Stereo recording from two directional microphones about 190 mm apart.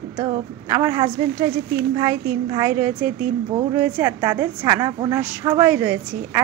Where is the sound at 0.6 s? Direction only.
20° right (ahead or behind).